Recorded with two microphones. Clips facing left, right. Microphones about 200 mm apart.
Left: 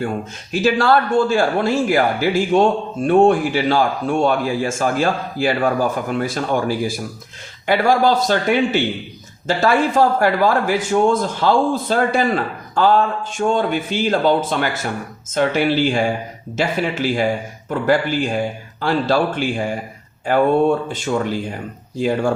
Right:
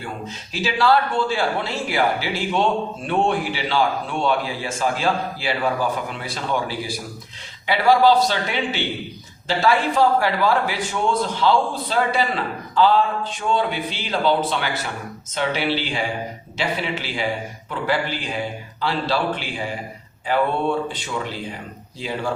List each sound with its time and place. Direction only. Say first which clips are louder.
0.5 s a man's voice: left 4 dB; 50° left (ahead or behind)